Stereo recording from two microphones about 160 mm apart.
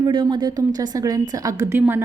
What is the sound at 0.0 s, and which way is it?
A woman's voice, 30° right (ahead or behind).